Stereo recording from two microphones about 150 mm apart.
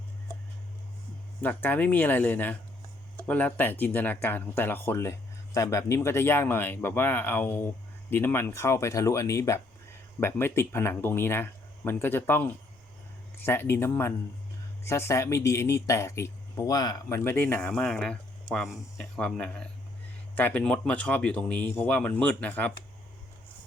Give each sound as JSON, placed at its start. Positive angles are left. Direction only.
{"t": 1.4, "sound": "speech", "side_deg": 10}